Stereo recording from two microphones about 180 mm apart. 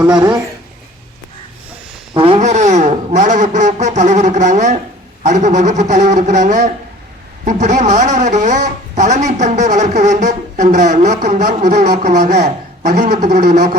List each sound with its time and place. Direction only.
0.2 s speech: 20° right (ahead or behind)
2.1 s speech: 30° right (ahead or behind); by 13.5 s 55° right (ahead or behind)